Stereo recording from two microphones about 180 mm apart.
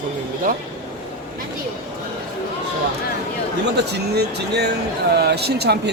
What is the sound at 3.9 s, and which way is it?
Speech, 65° right (ahead or behind).